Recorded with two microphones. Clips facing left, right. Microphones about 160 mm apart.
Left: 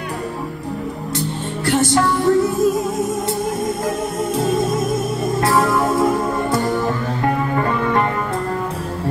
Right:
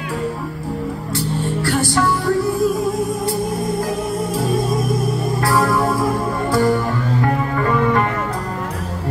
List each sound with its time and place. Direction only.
1.1 s music: 20° left (ahead or behind)
4.4 s music: 20° left (ahead or behind)
5.9 s music: 20° left (ahead or behind)